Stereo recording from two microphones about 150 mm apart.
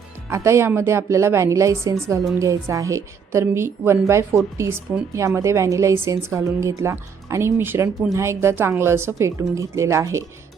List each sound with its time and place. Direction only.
0.3 s a woman's voice: 20° right (ahead or behind)